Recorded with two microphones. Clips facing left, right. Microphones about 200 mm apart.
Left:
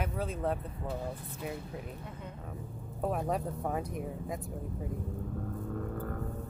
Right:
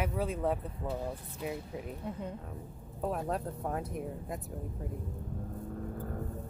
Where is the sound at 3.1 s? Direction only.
5° left (ahead or behind).